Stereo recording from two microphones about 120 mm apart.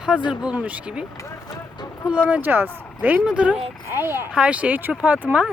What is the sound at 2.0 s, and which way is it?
Speech, 10° right (ahead or behind).